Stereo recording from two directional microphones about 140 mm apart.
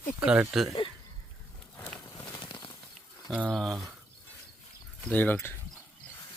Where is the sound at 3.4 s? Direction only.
Centre (ahead or behind).